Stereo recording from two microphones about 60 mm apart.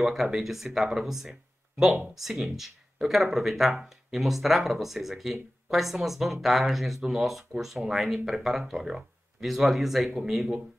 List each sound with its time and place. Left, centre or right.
0.0 s speech: centre